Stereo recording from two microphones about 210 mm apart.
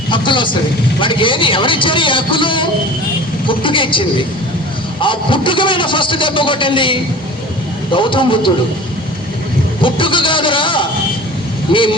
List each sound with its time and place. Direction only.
0.1 s vehicle: 25° left (ahead or behind)
0.9 s speech: 25° left (ahead or behind)
9.8 s speech: 25° left (ahead or behind)